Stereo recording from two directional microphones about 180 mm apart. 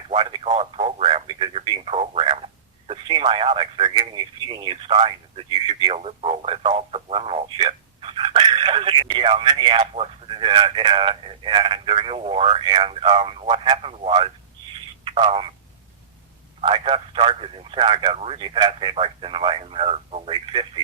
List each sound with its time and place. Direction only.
0.1 s speech: 30° right (ahead or behind)
16.6 s speech: 25° right (ahead or behind)